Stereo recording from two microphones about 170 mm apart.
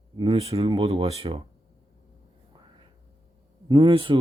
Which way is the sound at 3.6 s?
30° right (ahead or behind).